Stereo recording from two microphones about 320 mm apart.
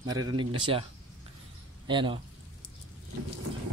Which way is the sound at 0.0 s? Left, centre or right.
Centre.